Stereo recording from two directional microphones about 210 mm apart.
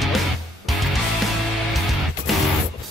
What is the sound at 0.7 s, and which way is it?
Music, centre (ahead or behind).